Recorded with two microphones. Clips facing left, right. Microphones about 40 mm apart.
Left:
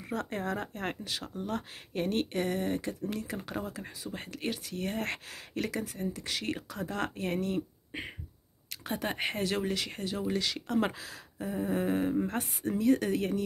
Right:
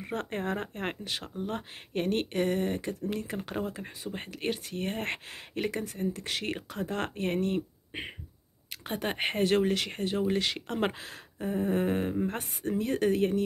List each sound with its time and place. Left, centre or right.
0.0 s speech: right
0.8 s speech: right
2.0 s speech: right